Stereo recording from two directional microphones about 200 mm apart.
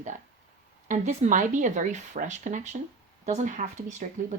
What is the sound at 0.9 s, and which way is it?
Speech, 40° right (ahead or behind).